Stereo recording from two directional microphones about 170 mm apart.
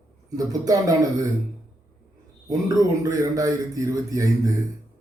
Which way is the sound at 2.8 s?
20° right (ahead or behind).